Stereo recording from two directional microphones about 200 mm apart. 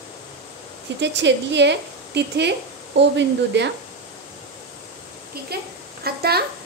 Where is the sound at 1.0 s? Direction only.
60° right (ahead or behind).